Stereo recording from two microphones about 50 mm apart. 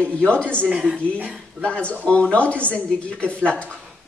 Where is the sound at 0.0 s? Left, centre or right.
Left.